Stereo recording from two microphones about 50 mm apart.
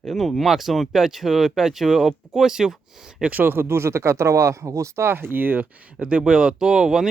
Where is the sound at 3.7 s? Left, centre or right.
Right.